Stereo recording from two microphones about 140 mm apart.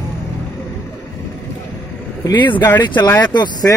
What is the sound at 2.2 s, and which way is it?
Speech, 30° left (ahead or behind).